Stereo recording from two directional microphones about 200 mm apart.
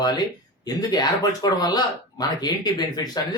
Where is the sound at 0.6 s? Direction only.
20° left (ahead or behind).